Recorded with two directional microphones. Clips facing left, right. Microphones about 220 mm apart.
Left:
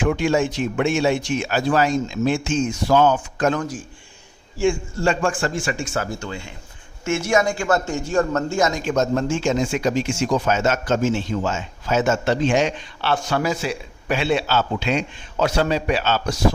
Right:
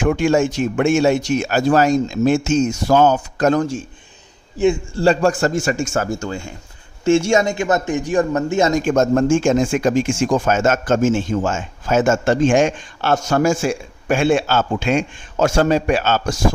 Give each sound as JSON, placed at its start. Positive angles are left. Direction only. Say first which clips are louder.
{"t": 0.0, "sound": "speech", "louder": "right 3 dB", "side_deg": -45}
{"t": 4.5, "sound": "a man's voice", "louder": "right 4 dB", "side_deg": -20}
{"t": 4.9, "sound": "speech", "louder": "right 6 dB", "side_deg": -35}
{"t": 7.0, "sound": "a man's voice", "louder": "right 5 dB", "side_deg": -30}
{"t": 8.7, "sound": "speech", "louder": "right 5 dB", "side_deg": -50}